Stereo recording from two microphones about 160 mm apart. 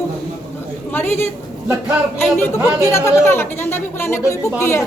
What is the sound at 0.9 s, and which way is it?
Speech, 15° left (ahead or behind).